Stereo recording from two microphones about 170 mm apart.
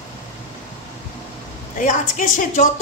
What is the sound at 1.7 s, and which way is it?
Speech, 50° left (ahead or behind).